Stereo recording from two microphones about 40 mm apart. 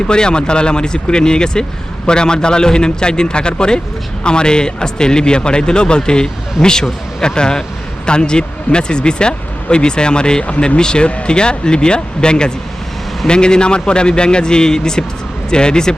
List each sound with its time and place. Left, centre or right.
0.1 s a man's voice: left